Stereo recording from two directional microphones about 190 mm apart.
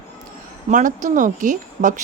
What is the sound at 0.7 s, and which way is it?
Speech, 40° right (ahead or behind).